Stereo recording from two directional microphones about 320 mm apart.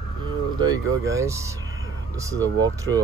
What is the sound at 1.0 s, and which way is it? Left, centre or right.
Speech, centre.